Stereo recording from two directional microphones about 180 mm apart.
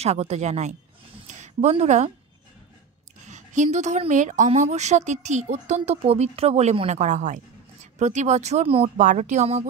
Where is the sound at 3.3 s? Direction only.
40° right (ahead or behind).